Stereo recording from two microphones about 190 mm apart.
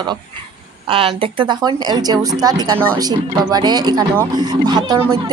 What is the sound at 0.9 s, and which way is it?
Speech, 25° right (ahead or behind).